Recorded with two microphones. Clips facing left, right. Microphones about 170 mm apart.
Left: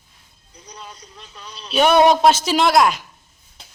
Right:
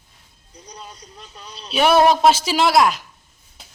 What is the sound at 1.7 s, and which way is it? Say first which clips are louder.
Speech: left 1 dB; 5° right (ahead or behind).